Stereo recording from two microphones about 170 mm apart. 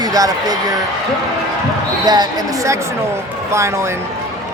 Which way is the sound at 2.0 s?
25° right (ahead or behind).